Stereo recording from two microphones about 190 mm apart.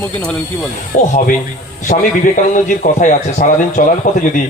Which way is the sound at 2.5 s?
40° left (ahead or behind).